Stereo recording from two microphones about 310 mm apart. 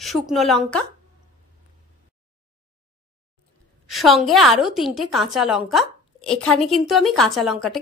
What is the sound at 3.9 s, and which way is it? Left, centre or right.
A woman's voice, centre.